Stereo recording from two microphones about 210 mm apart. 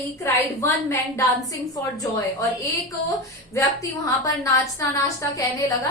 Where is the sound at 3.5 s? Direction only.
15° left (ahead or behind).